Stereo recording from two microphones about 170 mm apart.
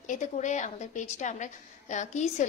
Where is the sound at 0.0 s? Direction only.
45° left (ahead or behind).